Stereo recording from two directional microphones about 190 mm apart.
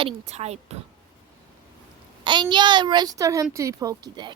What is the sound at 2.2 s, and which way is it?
A woman's voice, 25° right (ahead or behind).